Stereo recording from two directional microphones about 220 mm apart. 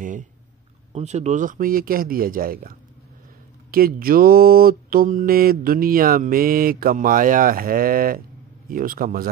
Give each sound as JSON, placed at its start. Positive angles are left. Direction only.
{"t": 0.0, "sound": "mantra", "side_deg": -35}